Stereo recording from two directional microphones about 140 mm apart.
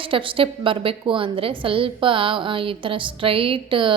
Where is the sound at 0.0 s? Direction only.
40° right (ahead or behind).